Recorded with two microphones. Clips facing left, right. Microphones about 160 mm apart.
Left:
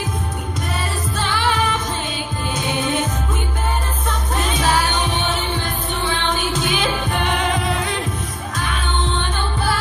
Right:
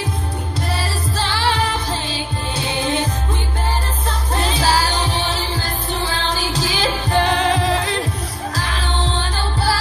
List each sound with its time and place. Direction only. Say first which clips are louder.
0.7 s music: right 1 dB; 30° right (ahead or behind)
4.1 s music: right 1 dB; 30° right (ahead or behind)